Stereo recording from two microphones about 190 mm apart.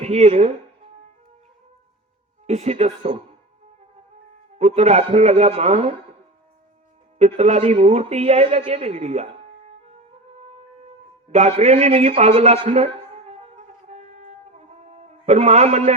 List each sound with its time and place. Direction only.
0.0 s a man's voice: 35° right (ahead or behind)
2.5 s a man's voice: 35° right (ahead or behind)
4.5 s a man's voice: 35° right (ahead or behind)
7.2 s a man's voice: 35° right (ahead or behind)
10.3 s music: 35° right (ahead or behind)
11.3 s a sound: 35° right (ahead or behind)